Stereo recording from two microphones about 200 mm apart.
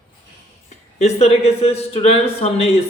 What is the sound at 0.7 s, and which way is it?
Speech, 35° left (ahead or behind).